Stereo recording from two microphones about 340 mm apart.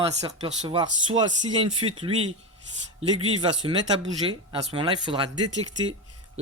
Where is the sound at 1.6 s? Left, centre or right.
Centre.